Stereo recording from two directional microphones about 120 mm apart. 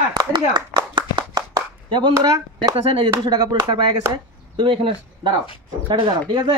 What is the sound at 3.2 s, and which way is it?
Speech, 40° right (ahead or behind).